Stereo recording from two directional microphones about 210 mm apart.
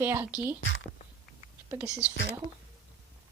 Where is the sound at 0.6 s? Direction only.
65° left (ahead or behind).